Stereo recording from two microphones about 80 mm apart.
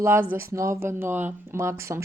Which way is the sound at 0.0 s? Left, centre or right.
Right.